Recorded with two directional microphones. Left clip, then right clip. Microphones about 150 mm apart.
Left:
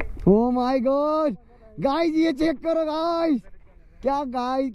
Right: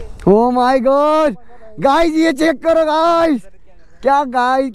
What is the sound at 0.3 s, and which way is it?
Speech, 25° right (ahead or behind).